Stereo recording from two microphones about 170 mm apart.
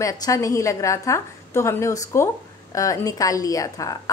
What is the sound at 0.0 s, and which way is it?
A woman's voice, 20° left (ahead or behind).